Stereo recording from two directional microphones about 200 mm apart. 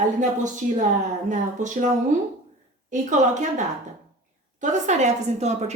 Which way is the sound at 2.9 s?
40° right (ahead or behind).